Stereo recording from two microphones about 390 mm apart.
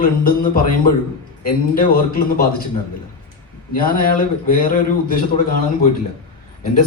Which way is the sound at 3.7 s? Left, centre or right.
Left.